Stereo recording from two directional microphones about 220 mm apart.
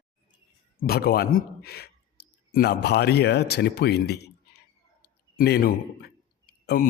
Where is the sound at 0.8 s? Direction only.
45° left (ahead or behind).